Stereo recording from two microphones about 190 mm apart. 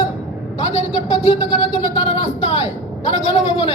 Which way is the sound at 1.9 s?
30° left (ahead or behind).